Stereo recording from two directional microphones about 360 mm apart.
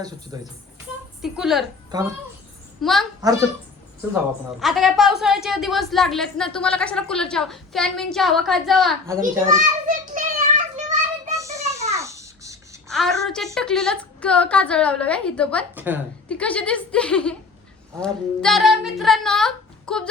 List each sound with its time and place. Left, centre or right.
0.3 s a woman's voice: centre
2.8 s a woman's voice: centre
4.6 s a woman's voice: centre
9.5 s children playing: right
11.3 s a child's voice: centre